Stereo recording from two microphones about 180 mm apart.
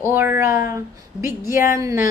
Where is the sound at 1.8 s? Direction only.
15° right (ahead or behind).